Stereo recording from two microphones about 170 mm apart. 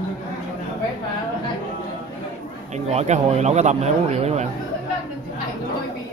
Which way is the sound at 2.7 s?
40° right (ahead or behind).